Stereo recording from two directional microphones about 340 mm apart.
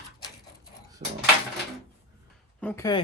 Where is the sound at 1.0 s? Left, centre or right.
Right.